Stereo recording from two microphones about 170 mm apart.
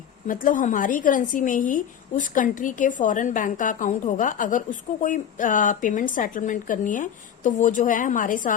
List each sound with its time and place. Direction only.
0.3 s a woman's voice: 50° left (ahead or behind)